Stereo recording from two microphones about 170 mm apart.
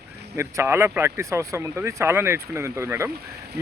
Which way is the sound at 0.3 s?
15° right (ahead or behind).